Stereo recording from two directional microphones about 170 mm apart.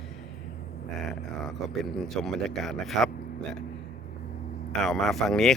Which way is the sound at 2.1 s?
Centre (ahead or behind).